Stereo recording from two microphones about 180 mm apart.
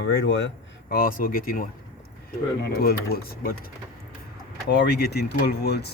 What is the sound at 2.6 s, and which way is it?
Speech, 60° left (ahead or behind).